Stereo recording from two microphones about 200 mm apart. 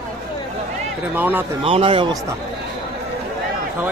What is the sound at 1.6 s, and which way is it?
Speech, 25° right (ahead or behind).